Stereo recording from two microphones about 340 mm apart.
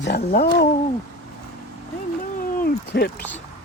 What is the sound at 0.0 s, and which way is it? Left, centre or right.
Speech, left.